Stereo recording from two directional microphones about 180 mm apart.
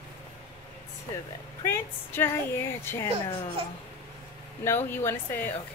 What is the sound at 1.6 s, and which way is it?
Speech, 15° left (ahead or behind).